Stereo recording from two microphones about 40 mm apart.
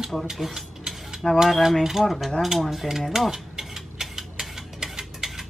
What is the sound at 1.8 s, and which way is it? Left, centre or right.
Speech, centre.